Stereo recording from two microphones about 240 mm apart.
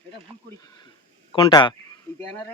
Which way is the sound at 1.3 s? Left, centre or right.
Centre.